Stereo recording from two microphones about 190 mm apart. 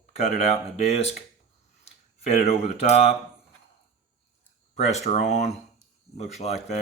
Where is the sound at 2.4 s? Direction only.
35° left (ahead or behind).